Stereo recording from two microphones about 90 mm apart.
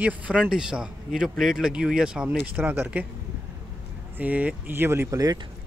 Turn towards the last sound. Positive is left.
turn(degrees=-45)  # may be behind; listen again after turning